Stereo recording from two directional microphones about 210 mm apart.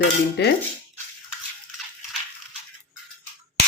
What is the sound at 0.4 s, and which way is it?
Speech, 55° left (ahead or behind).